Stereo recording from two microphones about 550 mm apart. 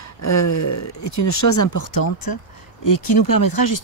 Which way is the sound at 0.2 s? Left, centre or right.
Left.